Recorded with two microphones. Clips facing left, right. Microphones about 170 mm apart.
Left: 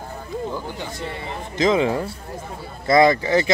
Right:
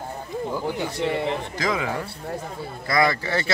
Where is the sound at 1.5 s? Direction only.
20° left (ahead or behind).